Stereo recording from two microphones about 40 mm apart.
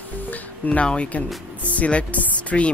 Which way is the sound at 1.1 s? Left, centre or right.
Left.